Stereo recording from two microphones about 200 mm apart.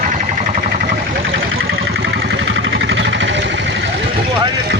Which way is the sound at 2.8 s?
65° right (ahead or behind).